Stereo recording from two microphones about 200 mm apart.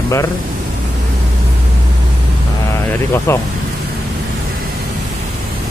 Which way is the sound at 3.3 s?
15° left (ahead or behind).